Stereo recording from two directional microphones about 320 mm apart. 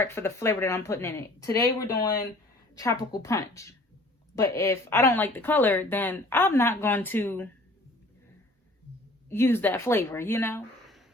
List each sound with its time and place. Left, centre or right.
0.0 s speech: centre
1.9 s speech: left
2.7 s speech: centre
9.3 s speech: centre